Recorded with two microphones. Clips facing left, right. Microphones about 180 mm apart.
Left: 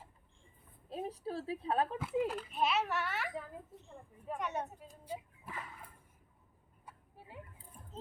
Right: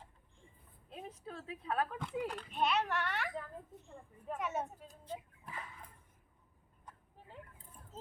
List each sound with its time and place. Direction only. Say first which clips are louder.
0.9 s a woman's voice: left 8 dB; 35° left (ahead or behind)
2.2 s a child's voice: left 1 dB; 5° left (ahead or behind)
6.8 s a sound: left 1 dB; 10° left (ahead or behind)